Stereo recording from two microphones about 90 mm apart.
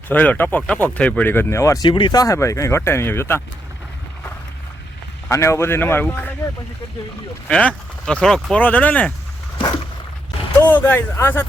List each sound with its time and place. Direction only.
0.1 s speech: 20° left (ahead or behind)
1.8 s speech: 60° left (ahead or behind)
2.1 s speech: 35° left (ahead or behind)
5.3 s speech: 35° left (ahead or behind)
7.4 s speech: 10° left (ahead or behind)
8.5 s speech: 15° left (ahead or behind)
10.7 s speech: 20° left (ahead or behind)